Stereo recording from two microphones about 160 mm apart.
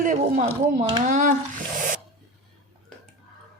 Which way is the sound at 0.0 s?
50° right (ahead or behind).